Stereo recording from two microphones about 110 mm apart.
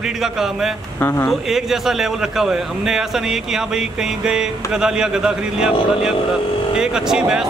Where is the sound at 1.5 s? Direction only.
5° right (ahead or behind).